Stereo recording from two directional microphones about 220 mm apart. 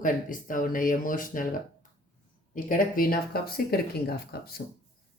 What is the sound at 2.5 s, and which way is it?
Speech, 40° left (ahead or behind).